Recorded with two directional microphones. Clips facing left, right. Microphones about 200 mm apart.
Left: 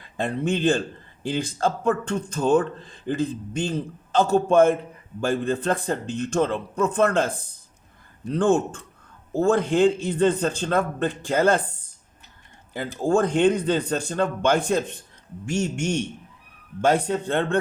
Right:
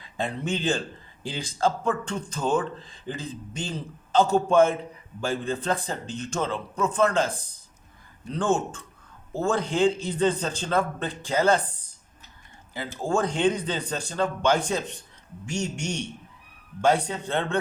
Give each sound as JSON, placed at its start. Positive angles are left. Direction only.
{"t": 0.0, "sound": "speech", "side_deg": 55}
{"t": 8.3, "sound": "speech", "side_deg": 60}
{"t": 12.7, "sound": "a man's voice", "side_deg": 55}